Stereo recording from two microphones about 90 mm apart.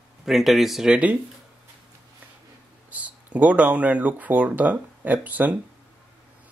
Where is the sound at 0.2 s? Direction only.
Centre (ahead or behind).